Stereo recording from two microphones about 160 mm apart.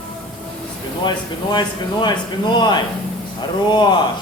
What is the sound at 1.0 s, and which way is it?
Speech, 25° left (ahead or behind).